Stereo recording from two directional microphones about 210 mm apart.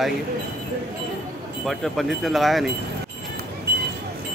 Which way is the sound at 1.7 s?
Centre (ahead or behind).